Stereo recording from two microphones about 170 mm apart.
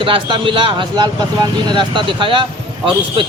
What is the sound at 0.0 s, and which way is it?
A man's voice, 30° right (ahead or behind).